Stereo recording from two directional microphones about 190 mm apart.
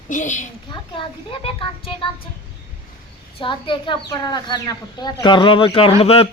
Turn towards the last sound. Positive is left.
turn(degrees=30)  # may be behind; listen again after turning